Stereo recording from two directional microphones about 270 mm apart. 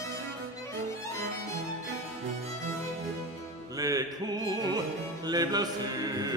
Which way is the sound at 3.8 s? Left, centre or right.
Centre.